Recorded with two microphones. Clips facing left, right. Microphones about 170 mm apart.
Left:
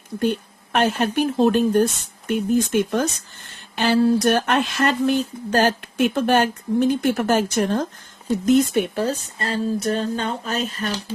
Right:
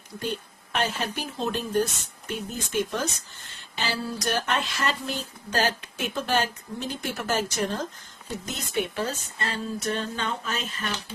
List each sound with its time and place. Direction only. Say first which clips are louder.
0.2 s speech: left 9 dB; 60° left (ahead or behind); by 11.0 s 40° left (ahead or behind)